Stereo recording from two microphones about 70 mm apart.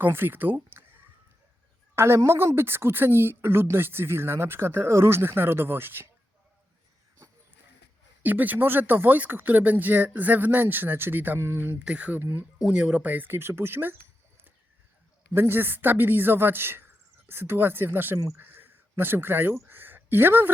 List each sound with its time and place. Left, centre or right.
0.0 s speech: right
2.0 s speech: right
8.2 s speech: right
11.8 s speech: centre
12.6 s speech: centre; by 13.9 s right
15.3 s speech: right
19.5 s a sound: right